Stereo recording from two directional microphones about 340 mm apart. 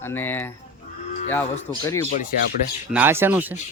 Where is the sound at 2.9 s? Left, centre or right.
Centre.